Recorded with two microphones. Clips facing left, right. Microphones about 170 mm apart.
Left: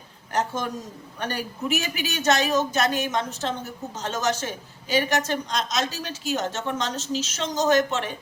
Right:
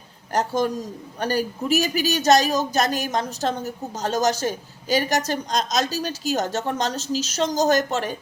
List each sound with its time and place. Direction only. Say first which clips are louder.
0.3 s speech: right 5 dB; 35° right (ahead or behind)